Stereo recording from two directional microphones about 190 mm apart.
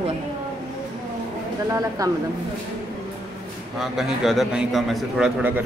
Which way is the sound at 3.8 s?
Centre (ahead or behind).